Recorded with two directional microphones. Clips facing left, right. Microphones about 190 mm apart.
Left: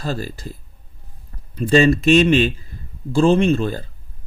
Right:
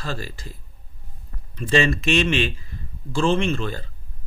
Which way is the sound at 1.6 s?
35° left (ahead or behind).